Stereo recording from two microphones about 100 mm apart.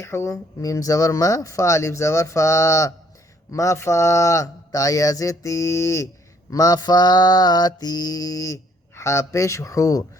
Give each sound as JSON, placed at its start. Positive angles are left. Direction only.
{"t": 0.0, "sound": "mantra", "side_deg": 30}